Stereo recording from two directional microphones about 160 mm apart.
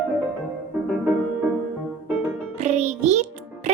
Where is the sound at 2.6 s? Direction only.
45° right (ahead or behind).